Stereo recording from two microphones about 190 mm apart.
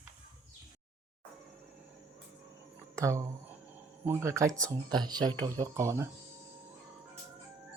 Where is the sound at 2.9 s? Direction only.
15° right (ahead or behind).